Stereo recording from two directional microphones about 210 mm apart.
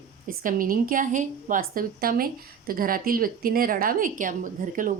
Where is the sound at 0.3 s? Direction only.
40° right (ahead or behind).